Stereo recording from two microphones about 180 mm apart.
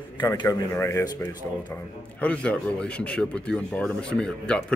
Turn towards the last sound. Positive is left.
turn(degrees=5)  # may be behind; listen again after turning